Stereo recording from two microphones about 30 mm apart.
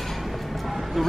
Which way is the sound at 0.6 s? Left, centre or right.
Centre.